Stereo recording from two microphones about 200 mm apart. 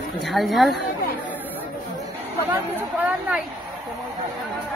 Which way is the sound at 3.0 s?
5° right (ahead or behind).